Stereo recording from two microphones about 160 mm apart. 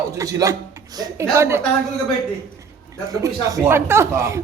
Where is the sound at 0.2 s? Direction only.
20° right (ahead or behind).